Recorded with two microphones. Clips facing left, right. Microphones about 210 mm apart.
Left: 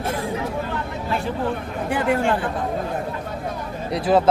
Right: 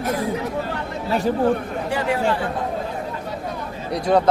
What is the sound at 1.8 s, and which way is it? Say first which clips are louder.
Speech: left 2 dB; 55° left (ahead or behind).